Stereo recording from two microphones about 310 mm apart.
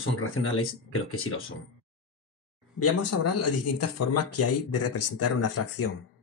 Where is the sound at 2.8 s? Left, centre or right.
Left.